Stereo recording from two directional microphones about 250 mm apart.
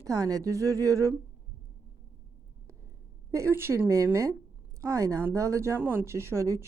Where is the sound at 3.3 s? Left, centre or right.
Centre.